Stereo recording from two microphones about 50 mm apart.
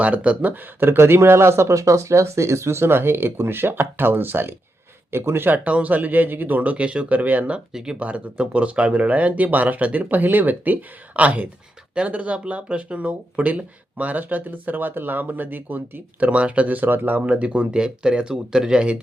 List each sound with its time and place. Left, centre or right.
0.0 s speech: right
0.9 s speech: right
5.6 s speech: right
7.7 s speech: centre
7.9 s speech: right
16.2 s speech: right
17.2 s speech: right